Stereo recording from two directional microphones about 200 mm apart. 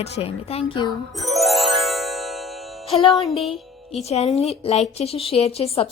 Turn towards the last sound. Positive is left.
turn(degrees=30)  # may be behind; listen again after turning